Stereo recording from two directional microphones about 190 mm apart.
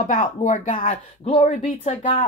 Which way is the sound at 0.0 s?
40° left (ahead or behind).